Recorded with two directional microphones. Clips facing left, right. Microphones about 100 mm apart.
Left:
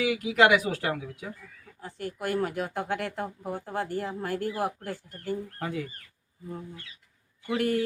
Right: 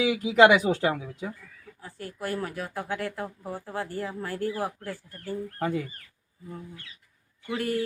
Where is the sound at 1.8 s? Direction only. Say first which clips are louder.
Left 2 dB; 20° left (ahead or behind).